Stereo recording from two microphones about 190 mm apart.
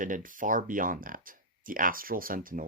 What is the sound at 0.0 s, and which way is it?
Speech, 45° right (ahead or behind).